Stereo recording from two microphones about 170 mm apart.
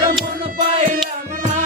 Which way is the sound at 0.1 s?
65° right (ahead or behind).